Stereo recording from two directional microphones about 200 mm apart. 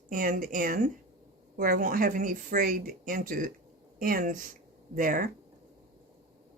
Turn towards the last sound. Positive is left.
turn(degrees=-45)  # may be behind; listen again after turning